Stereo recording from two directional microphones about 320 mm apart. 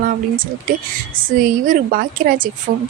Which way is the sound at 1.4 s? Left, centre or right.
Right.